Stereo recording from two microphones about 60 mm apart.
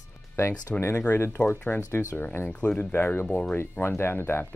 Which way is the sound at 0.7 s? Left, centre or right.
Left.